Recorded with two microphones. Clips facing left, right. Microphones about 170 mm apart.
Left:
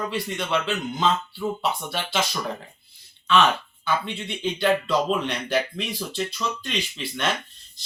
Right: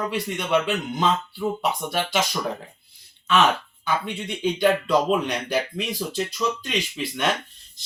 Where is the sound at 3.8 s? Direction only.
15° right (ahead or behind).